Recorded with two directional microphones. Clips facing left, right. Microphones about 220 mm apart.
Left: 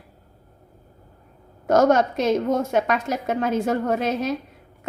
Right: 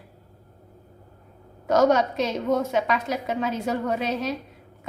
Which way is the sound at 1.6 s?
50° left (ahead or behind).